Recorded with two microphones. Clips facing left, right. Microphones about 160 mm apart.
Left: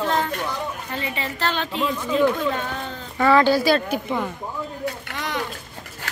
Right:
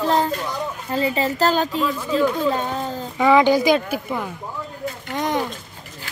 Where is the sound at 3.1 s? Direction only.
15° right (ahead or behind).